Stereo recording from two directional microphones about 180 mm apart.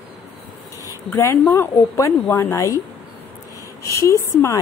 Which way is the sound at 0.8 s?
15° left (ahead or behind).